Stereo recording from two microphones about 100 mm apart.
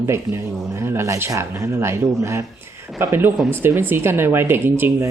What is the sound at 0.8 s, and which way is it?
Speech, 25° right (ahead or behind).